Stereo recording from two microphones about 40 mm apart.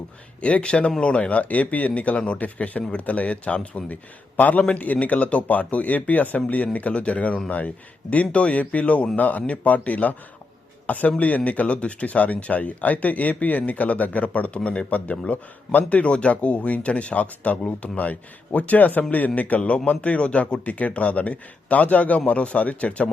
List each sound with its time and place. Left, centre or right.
0.4 s speech: left
4.4 s a man's voice: left
15.1 s a man's voice: left